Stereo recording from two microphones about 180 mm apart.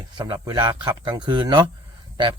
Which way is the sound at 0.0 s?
25° right (ahead or behind).